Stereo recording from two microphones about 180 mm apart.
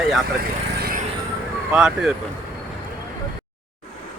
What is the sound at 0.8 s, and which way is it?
Vehicle, 55° right (ahead or behind).